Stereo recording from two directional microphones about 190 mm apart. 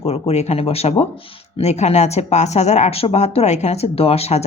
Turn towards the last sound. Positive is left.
turn(degrees=35)  # may be behind; listen again after turning